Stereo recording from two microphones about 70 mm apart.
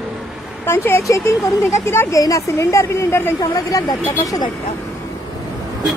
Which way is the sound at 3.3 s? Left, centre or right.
Left.